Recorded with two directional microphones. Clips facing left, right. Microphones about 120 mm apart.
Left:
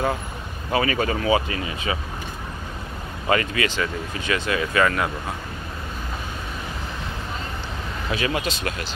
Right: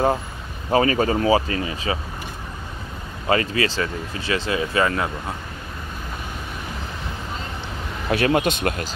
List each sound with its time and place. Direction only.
0.7 s speech: 35° right (ahead or behind)
3.3 s speech: 30° right (ahead or behind)
8.1 s speech: 55° right (ahead or behind)